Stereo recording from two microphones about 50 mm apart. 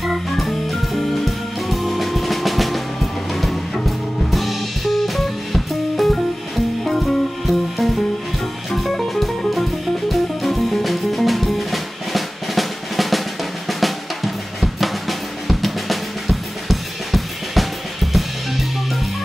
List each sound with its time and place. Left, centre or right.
0.0 s organ: centre
8.7 s music: centre
13.7 s drum: centre